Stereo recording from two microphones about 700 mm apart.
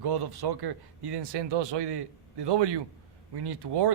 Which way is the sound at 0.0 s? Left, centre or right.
Right.